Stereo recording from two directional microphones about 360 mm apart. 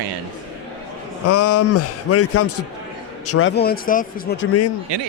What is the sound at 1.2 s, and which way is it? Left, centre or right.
A man's voice, left.